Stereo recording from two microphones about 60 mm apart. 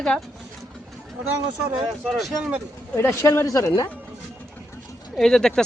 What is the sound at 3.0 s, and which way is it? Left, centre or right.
Speech, left.